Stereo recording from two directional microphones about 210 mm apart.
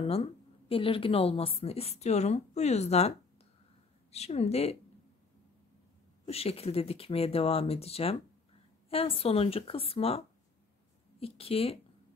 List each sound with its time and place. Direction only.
0.0 s a woman's voice: 30° left (ahead or behind)
6.2 s a woman's voice: 30° left (ahead or behind)